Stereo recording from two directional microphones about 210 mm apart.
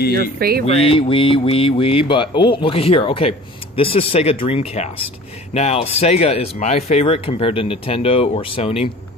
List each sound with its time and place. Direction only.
0.4 s speech: 45° right (ahead or behind)
0.7 s speech: 25° left (ahead or behind)